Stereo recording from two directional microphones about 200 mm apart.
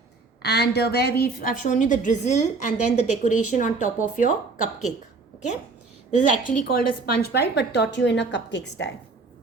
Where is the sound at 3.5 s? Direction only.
40° left (ahead or behind).